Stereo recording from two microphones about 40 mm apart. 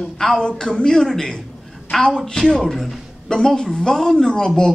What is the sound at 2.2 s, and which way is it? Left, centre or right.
Speech, centre.